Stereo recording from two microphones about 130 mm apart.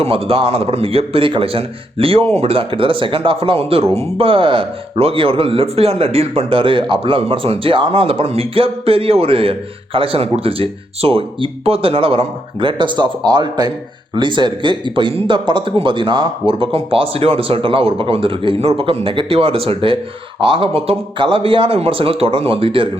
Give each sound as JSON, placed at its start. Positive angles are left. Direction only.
{"t": 0.0, "sound": "speech", "side_deg": -45}